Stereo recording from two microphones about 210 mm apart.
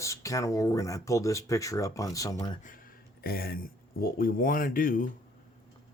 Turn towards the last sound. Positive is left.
turn(degrees=40)  # may be behind; listen again after turning